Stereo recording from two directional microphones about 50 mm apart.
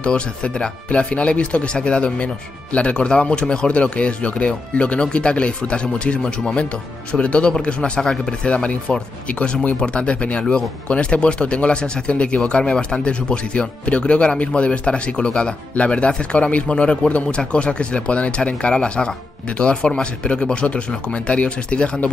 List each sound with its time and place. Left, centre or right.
0.0 s speech: centre